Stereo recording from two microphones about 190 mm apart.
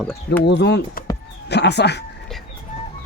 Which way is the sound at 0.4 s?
65° left (ahead or behind).